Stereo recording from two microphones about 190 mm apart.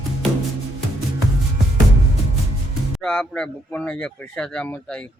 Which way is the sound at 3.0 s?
5° left (ahead or behind).